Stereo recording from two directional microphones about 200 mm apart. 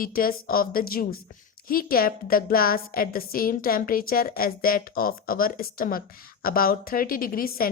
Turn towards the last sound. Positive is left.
turn(degrees=45)  # may be behind; listen again after turning